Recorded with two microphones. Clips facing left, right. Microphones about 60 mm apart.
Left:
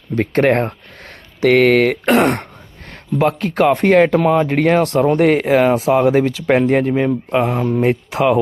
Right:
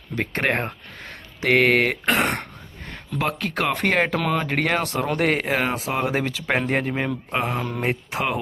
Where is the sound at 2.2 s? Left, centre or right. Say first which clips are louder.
Left 8 dB; centre.